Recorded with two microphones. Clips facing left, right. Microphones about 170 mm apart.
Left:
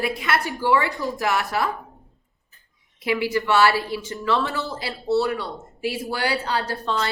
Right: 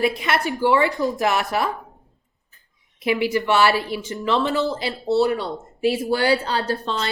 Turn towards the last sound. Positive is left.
turn(degrees=-25)  # may be behind; listen again after turning